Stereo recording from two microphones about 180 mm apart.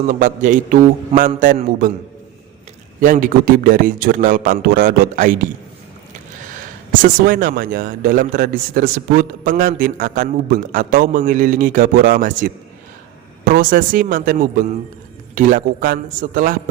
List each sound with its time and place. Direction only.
0.1 s a man's voice: 45° right (ahead or behind)
3.0 s a man's voice: 45° right (ahead or behind)
7.0 s a man's voice: 50° right (ahead or behind)